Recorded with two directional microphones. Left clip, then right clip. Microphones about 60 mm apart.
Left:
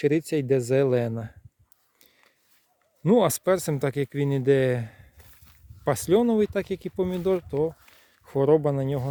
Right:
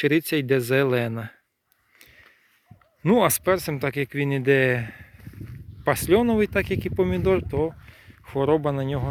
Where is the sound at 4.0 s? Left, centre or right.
Left.